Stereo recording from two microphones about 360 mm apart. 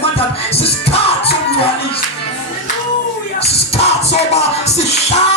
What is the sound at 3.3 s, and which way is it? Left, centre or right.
Music, centre.